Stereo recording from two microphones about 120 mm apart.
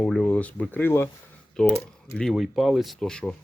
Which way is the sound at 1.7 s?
5° left (ahead or behind).